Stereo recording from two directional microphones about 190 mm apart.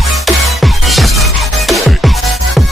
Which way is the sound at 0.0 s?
Centre (ahead or behind).